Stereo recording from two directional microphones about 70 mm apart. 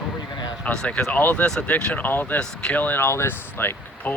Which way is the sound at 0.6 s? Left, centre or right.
Centre.